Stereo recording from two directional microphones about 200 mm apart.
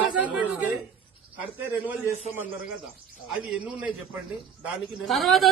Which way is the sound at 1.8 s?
10° right (ahead or behind).